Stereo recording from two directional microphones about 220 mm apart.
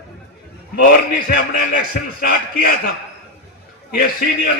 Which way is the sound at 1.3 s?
40° left (ahead or behind).